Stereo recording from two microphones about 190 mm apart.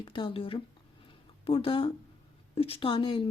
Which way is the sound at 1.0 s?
30° left (ahead or behind).